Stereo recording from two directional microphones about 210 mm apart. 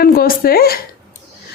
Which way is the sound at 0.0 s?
45° left (ahead or behind).